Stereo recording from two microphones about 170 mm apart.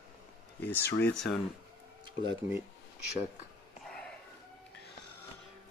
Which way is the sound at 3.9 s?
5° left (ahead or behind).